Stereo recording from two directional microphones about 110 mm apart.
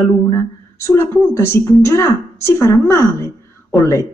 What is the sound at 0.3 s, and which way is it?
Speech, 25° left (ahead or behind).